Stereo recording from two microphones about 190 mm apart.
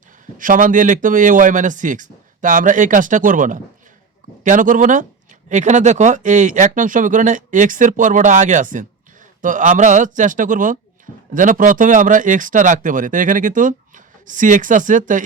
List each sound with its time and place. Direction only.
0.3 s speech: 45° right (ahead or behind)